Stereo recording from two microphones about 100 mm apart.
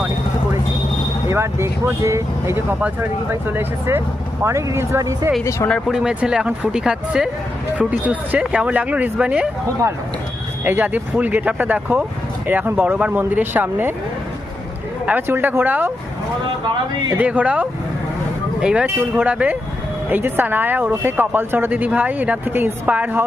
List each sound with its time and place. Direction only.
1.3 s speech: 25° right (ahead or behind)
5.9 s speech: 5° right (ahead or behind)
10.6 s speech: 20° right (ahead or behind)
15.0 s speech: 20° right (ahead or behind)
17.2 s speech: 15° right (ahead or behind)